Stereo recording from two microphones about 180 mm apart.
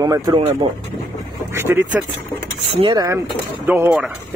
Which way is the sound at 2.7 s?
25° right (ahead or behind).